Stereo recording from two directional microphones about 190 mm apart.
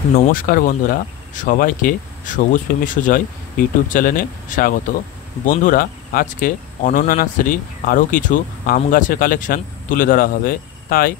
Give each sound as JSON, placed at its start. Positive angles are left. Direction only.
{"t": 0.3, "sound": "speech", "side_deg": 50}